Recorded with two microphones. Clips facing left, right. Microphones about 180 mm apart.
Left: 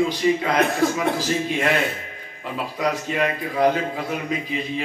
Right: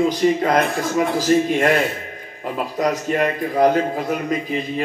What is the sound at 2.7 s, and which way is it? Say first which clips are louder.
A man's voice: right 3 dB; 45° right (ahead or behind).